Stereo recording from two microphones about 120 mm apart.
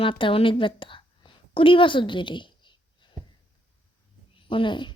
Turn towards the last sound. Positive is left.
turn(degrees=40)  # may be behind; listen again after turning